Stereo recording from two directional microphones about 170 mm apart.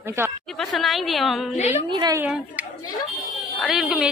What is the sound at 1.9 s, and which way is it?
Speech, 25° right (ahead or behind).